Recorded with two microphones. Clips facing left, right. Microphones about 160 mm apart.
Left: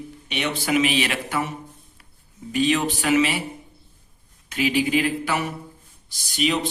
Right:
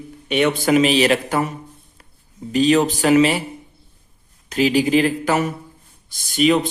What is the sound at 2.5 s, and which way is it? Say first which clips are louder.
Speech: right 6 dB; 40° right (ahead or behind).